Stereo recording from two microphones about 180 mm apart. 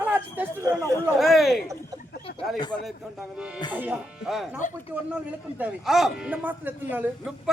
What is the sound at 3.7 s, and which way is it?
Speech, 10° right (ahead or behind).